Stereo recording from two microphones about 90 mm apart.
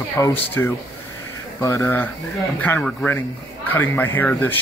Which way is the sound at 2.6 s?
15° left (ahead or behind).